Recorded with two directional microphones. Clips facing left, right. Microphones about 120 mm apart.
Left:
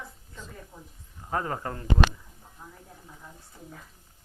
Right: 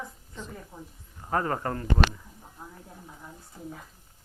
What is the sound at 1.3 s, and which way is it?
Speech, 40° right (ahead or behind).